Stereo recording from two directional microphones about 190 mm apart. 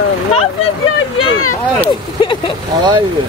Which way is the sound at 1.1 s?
90° left.